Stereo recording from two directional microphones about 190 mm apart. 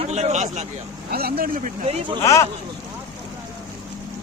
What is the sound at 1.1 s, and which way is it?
Speech, 55° right (ahead or behind).